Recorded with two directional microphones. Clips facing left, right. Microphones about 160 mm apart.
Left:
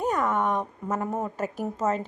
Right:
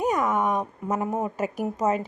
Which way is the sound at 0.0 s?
10° right (ahead or behind).